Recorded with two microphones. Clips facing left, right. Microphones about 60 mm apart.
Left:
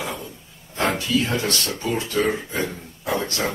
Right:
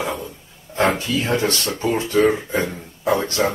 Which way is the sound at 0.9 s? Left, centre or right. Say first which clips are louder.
Right 2 dB; right.